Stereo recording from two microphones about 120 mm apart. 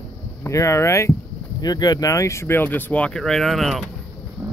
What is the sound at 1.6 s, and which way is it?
Speech, 35° left (ahead or behind).